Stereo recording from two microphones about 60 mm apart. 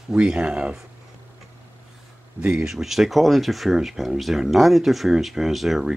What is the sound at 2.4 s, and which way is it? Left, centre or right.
Speech, centre.